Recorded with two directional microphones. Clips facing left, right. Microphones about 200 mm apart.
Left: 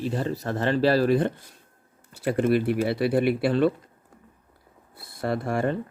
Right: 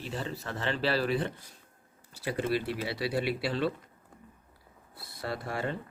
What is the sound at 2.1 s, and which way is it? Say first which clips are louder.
Speech: left 8 dB; 55° left (ahead or behind).